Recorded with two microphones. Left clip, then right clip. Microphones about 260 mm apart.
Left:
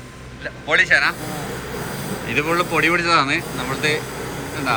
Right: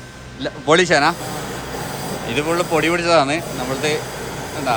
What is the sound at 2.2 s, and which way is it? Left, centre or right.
Speech, centre.